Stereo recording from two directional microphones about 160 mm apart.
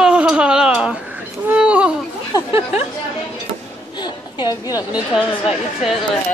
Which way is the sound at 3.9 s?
25° left (ahead or behind).